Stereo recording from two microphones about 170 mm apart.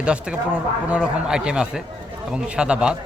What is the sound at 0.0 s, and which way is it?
Speech, 5° right (ahead or behind).